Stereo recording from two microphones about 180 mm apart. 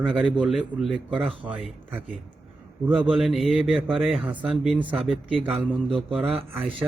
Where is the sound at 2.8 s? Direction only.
10° right (ahead or behind).